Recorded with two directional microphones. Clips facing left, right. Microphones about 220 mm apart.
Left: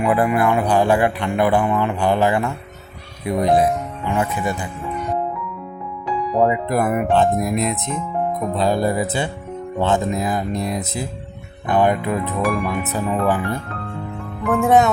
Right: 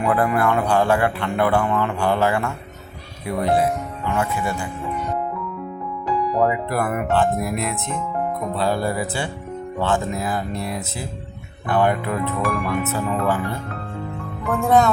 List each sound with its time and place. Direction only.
0.0 s speech: 15° left (ahead or behind)
6.3 s speech: 20° left (ahead or behind)
12.4 s speech: centre (ahead or behind)
12.6 s speech: 20° left (ahead or behind)